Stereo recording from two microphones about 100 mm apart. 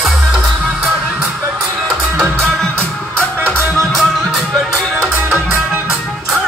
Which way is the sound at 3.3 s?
20° right (ahead or behind).